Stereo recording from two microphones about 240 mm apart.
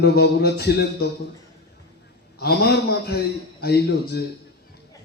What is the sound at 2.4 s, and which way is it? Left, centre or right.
A man's voice, left.